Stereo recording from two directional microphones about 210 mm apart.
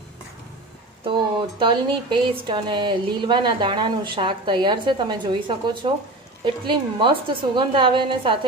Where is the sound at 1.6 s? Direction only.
25° right (ahead or behind).